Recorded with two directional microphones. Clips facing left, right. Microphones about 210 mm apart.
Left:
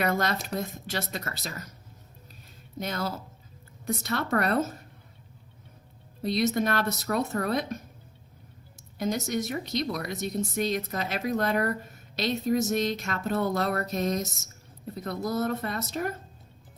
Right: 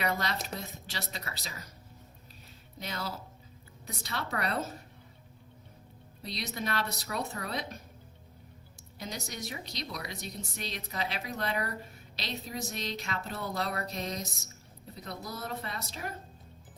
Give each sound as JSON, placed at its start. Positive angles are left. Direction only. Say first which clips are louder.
{"t": 0.0, "sound": "speech", "louder": "left 6 dB", "side_deg": 50}
{"t": 2.7, "sound": "speech", "louder": "left 7 dB", "side_deg": 50}
{"t": 6.2, "sound": "speech", "louder": "left 11 dB", "side_deg": 50}
{"t": 9.0, "sound": "speech", "louder": "left 12 dB", "side_deg": 50}